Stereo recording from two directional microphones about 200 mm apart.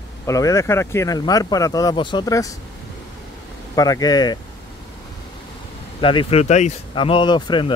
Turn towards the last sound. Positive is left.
turn(degrees=25)  # may be behind; listen again after turning